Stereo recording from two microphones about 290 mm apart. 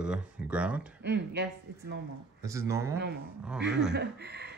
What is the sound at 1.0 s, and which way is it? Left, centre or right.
Speech, right.